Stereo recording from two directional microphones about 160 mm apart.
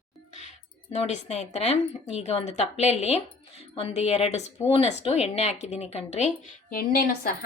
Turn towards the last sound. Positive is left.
turn(degrees=60)  # may be behind; listen again after turning